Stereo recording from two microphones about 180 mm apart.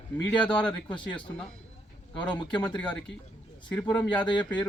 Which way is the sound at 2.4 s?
5° left (ahead or behind).